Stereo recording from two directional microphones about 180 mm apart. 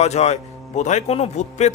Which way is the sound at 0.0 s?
35° left (ahead or behind).